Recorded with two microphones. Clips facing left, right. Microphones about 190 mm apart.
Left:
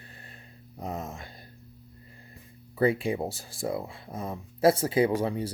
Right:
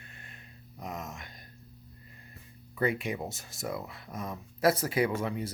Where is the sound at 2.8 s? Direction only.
30° left (ahead or behind).